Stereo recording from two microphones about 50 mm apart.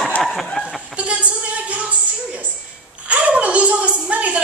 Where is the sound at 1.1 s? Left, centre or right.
Right.